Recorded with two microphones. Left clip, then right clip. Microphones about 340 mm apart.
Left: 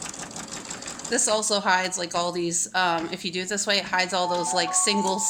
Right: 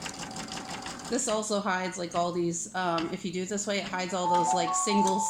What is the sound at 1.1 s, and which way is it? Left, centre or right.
Speech, left.